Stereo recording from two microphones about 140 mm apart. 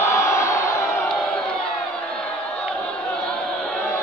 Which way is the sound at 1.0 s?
5° left (ahead or behind).